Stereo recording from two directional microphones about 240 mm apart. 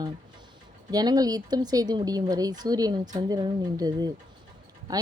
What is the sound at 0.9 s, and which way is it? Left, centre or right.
Speech, centre.